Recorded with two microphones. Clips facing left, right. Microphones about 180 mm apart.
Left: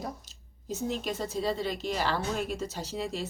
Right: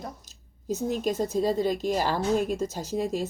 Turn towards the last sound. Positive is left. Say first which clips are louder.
# right 6 dB
turn(degrees=-45)  # may be behind; listen again after turning